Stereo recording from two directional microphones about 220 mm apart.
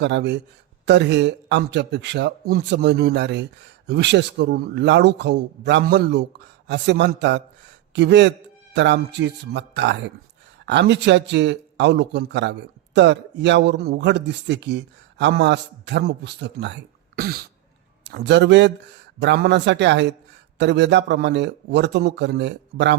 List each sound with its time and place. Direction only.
0.0 s a man's voice: 50° right (ahead or behind)